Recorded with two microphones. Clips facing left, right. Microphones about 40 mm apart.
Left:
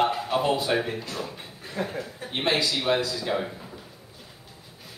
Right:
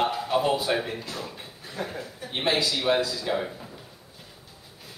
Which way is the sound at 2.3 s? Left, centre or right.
Centre.